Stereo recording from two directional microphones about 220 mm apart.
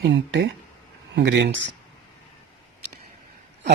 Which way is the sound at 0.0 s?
55° right (ahead or behind).